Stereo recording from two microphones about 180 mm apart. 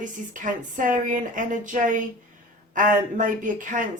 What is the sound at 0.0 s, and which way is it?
A woman's voice, 45° right (ahead or behind).